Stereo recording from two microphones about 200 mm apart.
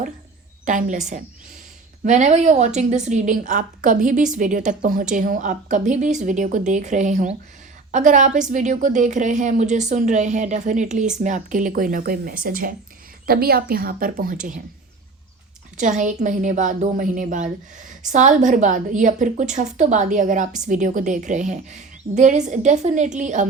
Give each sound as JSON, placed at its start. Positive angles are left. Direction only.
{"t": 0.6, "sound": "a woman's voice", "side_deg": -40}
{"t": 15.8, "sound": "a woman's voice", "side_deg": -40}